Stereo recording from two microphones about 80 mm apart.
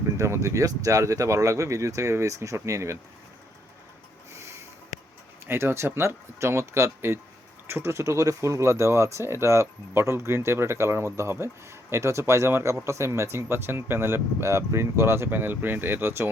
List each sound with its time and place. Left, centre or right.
0.2 s speech: right
5.5 s speech: right